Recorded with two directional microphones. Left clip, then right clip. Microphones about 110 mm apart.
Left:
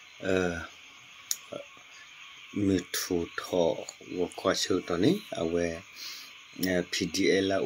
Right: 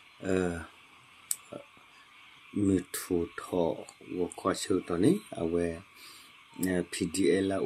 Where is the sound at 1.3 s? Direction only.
20° right (ahead or behind).